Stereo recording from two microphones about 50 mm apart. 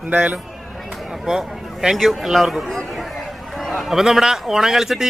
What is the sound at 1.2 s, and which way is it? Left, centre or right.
A man's voice, centre.